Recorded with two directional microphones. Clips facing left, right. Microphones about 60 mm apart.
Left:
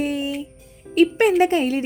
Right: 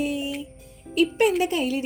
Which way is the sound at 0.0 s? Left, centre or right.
Left.